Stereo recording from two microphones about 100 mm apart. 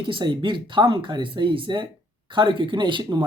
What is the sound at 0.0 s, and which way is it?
Speech, 55° right (ahead or behind).